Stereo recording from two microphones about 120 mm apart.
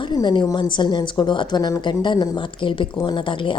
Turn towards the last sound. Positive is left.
turn(degrees=45)  # may be behind; listen again after turning